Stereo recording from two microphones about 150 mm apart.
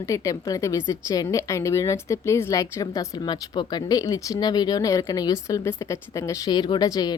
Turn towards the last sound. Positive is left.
turn(degrees=25)  # may be behind; listen again after turning